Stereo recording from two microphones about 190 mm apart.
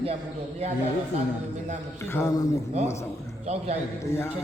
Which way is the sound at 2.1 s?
15° left (ahead or behind).